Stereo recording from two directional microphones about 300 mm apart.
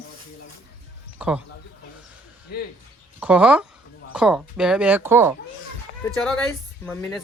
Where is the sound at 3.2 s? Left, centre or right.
Centre.